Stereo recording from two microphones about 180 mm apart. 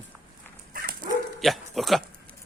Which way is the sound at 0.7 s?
55° right (ahead or behind).